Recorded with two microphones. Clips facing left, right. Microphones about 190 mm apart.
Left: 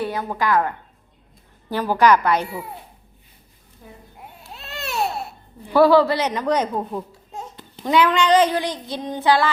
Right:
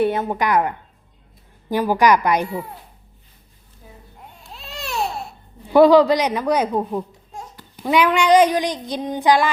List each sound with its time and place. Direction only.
0.0 s a woman's voice: 25° right (ahead or behind)
1.7 s speech: 15° right (ahead or behind)
4.2 s baby cry: 5° left (ahead or behind)
5.7 s speech: 20° right (ahead or behind)
7.3 s babbling: 20° left (ahead or behind)
7.9 s speech: 15° right (ahead or behind)